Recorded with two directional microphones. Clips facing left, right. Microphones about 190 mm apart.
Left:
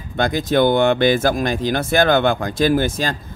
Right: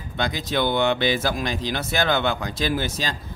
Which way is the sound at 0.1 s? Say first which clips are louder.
Left 7 dB; 50° left (ahead or behind).